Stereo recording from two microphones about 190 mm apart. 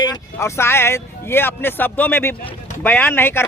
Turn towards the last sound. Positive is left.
turn(degrees=10)  # may be behind; listen again after turning